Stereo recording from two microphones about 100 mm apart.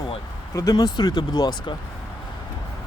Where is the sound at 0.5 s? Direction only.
35° left (ahead or behind).